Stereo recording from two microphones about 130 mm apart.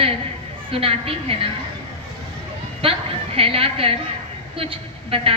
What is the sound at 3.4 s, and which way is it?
A woman's voice, 45° right (ahead or behind).